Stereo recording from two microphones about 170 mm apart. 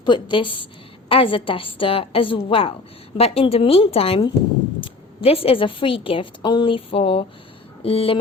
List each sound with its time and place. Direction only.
0.0 s a woman's voice: 30° left (ahead or behind)